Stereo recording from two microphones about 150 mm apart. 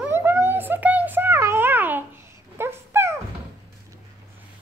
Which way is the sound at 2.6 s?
15° right (ahead or behind).